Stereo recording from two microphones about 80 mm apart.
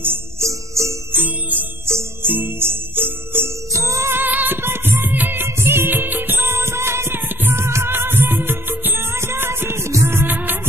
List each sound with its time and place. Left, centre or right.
0.0 s music: right
1.1 s music: right
4.2 s music: right